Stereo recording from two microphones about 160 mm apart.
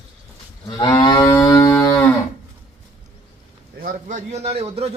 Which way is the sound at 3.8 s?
55° right (ahead or behind).